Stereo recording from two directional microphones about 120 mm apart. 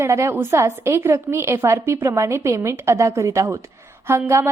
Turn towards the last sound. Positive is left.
turn(degrees=-20)  # may be behind; listen again after turning